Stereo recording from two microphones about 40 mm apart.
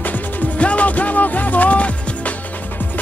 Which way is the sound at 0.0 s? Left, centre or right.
Left.